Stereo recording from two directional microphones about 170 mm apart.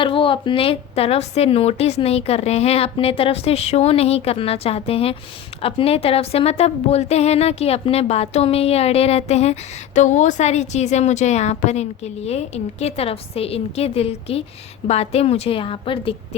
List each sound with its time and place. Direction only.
0.0 s a woman's voice: 30° left (ahead or behind)